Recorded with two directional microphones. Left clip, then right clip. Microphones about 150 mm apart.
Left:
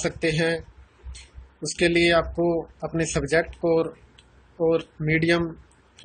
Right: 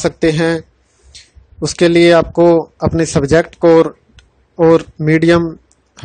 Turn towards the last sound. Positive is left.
turn(degrees=-80)